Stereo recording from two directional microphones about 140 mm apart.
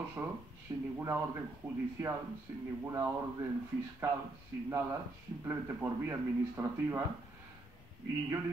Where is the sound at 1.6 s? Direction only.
30° right (ahead or behind).